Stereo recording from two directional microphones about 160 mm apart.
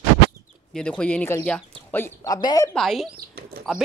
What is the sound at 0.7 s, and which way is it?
Speech, 5° left (ahead or behind).